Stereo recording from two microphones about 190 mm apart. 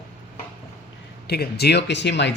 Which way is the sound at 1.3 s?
60° left (ahead or behind).